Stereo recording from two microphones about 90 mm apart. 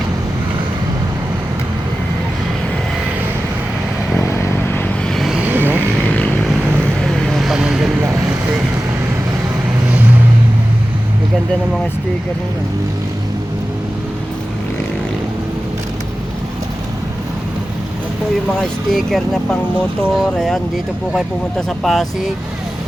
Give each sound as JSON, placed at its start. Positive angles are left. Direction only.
{"t": 4.3, "sound": "vehicle", "side_deg": 30}
{"t": 5.1, "sound": "vehicle", "side_deg": 0}
{"t": 5.4, "sound": "vehicle", "side_deg": -20}
{"t": 6.0, "sound": "vehicle", "side_deg": 20}
{"t": 7.0, "sound": "vehicle", "side_deg": 0}
{"t": 18.6, "sound": "speech", "side_deg": 5}
{"t": 21.8, "sound": "speech", "side_deg": 0}